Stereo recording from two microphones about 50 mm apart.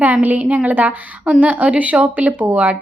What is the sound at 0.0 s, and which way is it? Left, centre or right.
A woman's voice, right.